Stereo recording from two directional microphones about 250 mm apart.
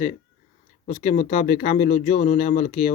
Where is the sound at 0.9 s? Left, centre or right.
Left.